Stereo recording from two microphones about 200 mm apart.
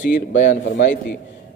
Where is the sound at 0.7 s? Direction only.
65° left (ahead or behind).